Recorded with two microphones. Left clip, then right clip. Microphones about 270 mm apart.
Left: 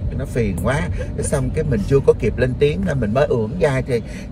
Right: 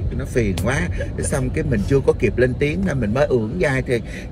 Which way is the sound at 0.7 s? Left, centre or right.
Left.